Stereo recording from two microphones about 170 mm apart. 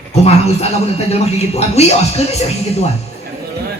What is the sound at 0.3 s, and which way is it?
A man's voice, 40° left (ahead or behind).